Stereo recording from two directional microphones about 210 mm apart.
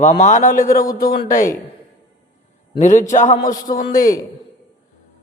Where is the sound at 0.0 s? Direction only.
35° left (ahead or behind).